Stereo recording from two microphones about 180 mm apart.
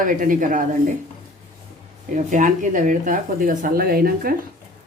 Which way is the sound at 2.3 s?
45° right (ahead or behind).